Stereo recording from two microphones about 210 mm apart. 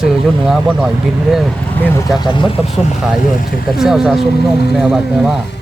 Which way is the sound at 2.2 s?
20° left (ahead or behind).